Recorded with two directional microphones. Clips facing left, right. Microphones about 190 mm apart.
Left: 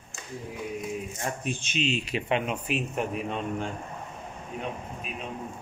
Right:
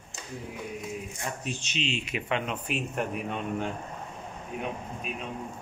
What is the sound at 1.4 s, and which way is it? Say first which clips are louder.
Speech: left 4 dB; 55° left (ahead or behind).